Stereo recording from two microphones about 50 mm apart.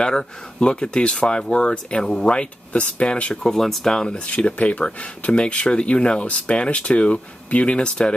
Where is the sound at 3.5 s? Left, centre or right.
Centre.